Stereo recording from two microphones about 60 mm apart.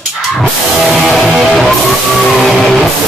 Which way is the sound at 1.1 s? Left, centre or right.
Centre.